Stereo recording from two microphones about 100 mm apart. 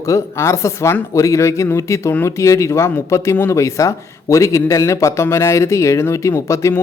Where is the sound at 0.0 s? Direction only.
30° left (ahead or behind).